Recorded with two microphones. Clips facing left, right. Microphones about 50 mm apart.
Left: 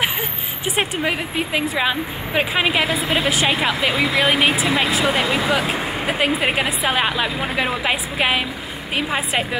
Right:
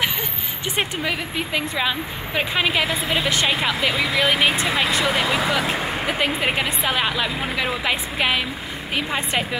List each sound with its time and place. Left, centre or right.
1.0 s speech: centre
5.0 s speech: left
5.7 s speech: centre